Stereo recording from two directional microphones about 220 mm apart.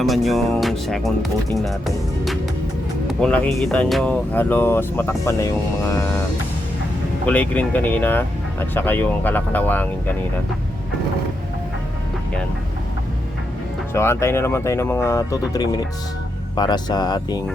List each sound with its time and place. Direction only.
0.0 s speech: centre (ahead or behind)
3.1 s speech: 5° left (ahead or behind)
7.3 s speech: 5° left (ahead or behind)
13.9 s speech: 10° left (ahead or behind)